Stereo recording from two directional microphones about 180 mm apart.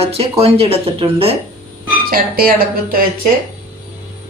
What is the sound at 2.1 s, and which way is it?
Speech, 55° right (ahead or behind).